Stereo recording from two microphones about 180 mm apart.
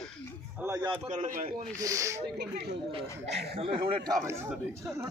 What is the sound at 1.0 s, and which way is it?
Speech, 45° right (ahead or behind).